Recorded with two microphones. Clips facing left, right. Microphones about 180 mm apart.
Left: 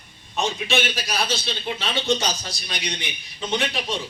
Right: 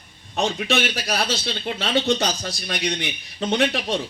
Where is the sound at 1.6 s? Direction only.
55° right (ahead or behind).